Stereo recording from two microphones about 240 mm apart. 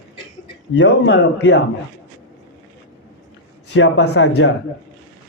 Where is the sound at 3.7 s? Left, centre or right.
Left.